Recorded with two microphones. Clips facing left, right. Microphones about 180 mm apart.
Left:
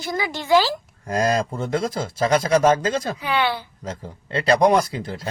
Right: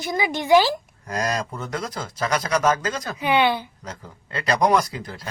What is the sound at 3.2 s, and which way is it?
Speech, 20° right (ahead or behind).